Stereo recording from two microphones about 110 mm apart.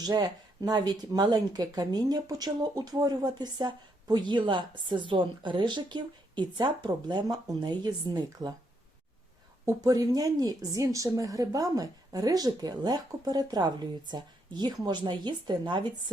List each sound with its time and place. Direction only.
0.0 s speech: 35° right (ahead or behind)
9.6 s speech: 35° right (ahead or behind)